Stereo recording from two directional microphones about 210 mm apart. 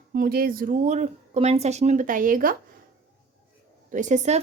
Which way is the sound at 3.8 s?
35° right (ahead or behind).